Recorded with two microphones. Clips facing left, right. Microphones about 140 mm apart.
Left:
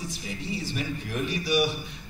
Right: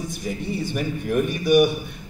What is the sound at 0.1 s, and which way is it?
A man's voice, 55° right (ahead or behind).